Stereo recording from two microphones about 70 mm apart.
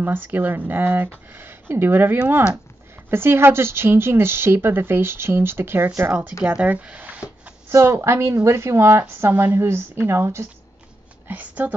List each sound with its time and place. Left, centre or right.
0.0 s speech: right
3.1 s speech: right
6.4 s speech: centre
7.7 s a woman's voice: right
11.2 s speech: right